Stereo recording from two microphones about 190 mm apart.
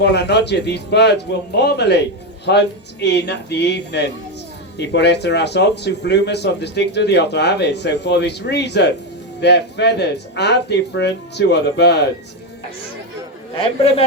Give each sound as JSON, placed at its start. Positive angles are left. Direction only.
{"t": 0.0, "sound": "speech", "side_deg": 60}
{"t": 13.6, "sound": "a man's voice", "side_deg": 30}